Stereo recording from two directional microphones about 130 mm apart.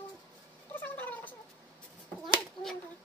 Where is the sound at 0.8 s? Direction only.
15° left (ahead or behind).